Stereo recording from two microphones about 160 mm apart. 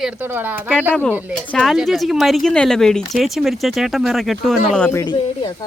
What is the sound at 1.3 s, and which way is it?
Speech, 5° left (ahead or behind).